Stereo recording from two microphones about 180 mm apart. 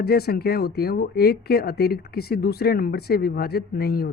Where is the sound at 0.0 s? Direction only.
60° left (ahead or behind).